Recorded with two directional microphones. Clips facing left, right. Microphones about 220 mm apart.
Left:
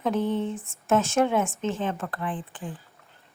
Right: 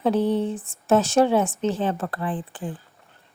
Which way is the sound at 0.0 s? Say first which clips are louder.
Right 4 dB; 35° right (ahead or behind).